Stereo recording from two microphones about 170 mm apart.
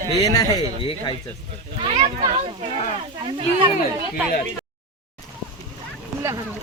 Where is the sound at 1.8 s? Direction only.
35° right (ahead or behind).